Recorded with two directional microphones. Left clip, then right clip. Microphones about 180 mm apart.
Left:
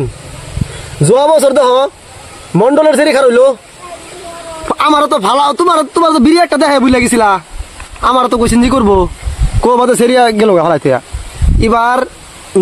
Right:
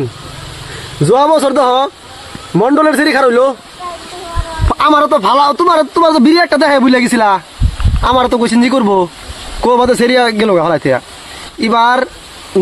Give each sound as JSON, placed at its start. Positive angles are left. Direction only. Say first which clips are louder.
{"t": 1.1, "sound": "a man's voice", "louder": "left 2 dB", "side_deg": 15}
{"t": 4.6, "sound": "a man's voice", "louder": "even", "side_deg": 20}